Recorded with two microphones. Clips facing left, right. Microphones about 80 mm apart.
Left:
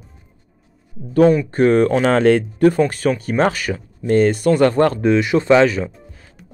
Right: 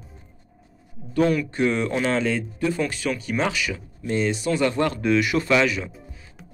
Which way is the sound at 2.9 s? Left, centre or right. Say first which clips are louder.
Left 7 dB; left.